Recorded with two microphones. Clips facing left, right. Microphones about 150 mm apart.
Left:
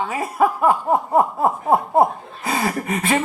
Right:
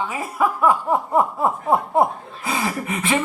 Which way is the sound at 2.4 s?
45° left (ahead or behind).